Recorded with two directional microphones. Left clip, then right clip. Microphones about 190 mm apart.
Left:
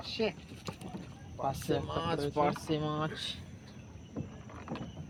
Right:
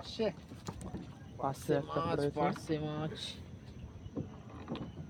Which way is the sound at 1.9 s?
55° left (ahead or behind).